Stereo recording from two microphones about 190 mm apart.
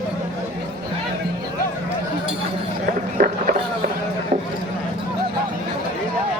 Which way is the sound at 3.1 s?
50° right (ahead or behind).